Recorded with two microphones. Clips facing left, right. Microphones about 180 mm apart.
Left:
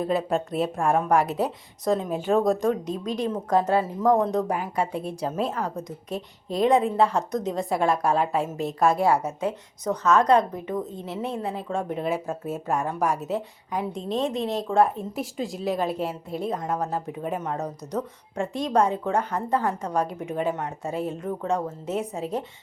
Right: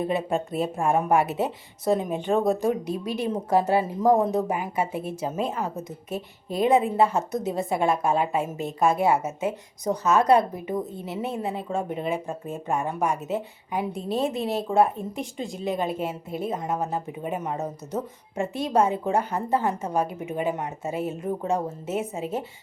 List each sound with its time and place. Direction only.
0.0 s a woman's voice: centre (ahead or behind)